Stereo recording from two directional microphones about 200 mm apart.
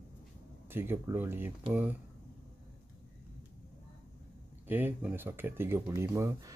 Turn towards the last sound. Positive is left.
turn(degrees=-15)  # may be behind; listen again after turning